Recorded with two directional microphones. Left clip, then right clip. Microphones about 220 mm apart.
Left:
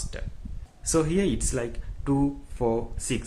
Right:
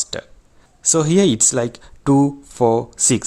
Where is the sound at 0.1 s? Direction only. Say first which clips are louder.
Right 13 dB; 45° right (ahead or behind).